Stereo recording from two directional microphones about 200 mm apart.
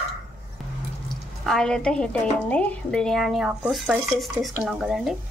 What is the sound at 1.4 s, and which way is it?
A woman's voice, centre (ahead or behind).